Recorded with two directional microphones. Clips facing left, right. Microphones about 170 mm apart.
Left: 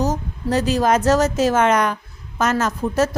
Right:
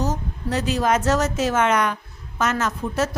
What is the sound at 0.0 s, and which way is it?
A woman's voice, 40° left (ahead or behind).